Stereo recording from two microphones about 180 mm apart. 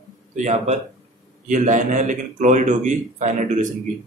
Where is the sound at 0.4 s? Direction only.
40° right (ahead or behind).